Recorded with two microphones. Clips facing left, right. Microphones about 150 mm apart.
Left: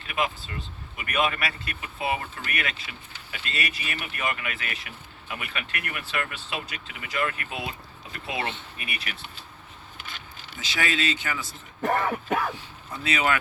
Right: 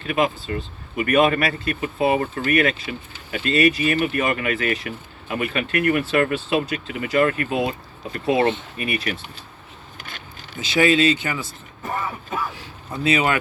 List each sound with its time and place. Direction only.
0.0 s speech: 45° right (ahead or behind)
10.0 s a sound: 50° right (ahead or behind)
10.6 s speech: 25° right (ahead or behind)
11.8 s speech: 75° left (ahead or behind)
12.9 s speech: 25° right (ahead or behind)